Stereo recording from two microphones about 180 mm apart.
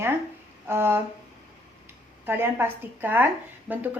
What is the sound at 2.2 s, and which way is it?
A woman's voice, 10° right (ahead or behind).